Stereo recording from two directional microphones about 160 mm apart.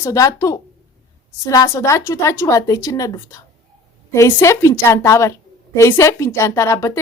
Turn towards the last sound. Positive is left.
turn(degrees=15)  # may be behind; listen again after turning